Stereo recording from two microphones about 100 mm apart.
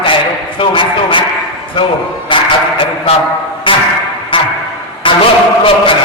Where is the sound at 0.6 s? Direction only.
55° left (ahead or behind).